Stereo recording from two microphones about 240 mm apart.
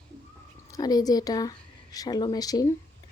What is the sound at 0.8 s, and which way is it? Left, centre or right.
A woman's voice, centre.